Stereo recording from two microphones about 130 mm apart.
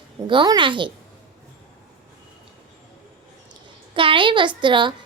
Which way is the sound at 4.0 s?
40° right (ahead or behind).